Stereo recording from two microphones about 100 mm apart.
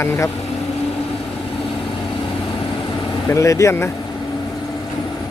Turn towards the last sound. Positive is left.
turn(degrees=30)  # may be behind; listen again after turning